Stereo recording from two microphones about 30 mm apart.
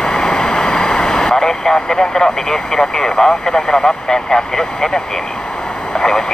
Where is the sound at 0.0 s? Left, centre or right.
Left.